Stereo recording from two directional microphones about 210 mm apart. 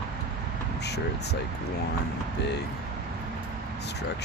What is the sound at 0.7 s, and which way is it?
Speech, 55° left (ahead or behind).